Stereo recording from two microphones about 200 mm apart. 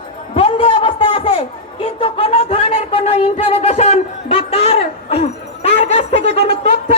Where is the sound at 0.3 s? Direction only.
30° left (ahead or behind).